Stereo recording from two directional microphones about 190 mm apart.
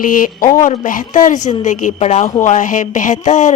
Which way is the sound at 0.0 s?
45° left (ahead or behind).